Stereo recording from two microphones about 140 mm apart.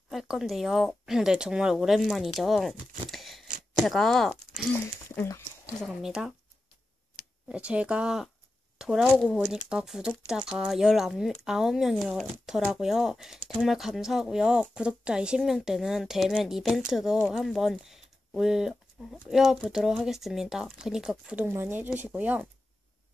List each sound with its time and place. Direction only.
0.1 s speech: 5° right (ahead or behind)
3.1 s a sound: centre (ahead or behind)
3.7 s speech: centre (ahead or behind)
5.1 s speech: 15° left (ahead or behind)
5.8 s speech: centre (ahead or behind)
7.4 s speech: 10° right (ahead or behind)